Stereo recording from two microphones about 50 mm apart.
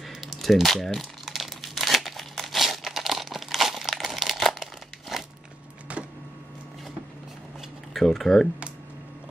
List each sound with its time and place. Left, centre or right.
0.0 s crumpling: centre
5.1 s crunch: centre
5.9 s a sound: right
7.9 s speech: centre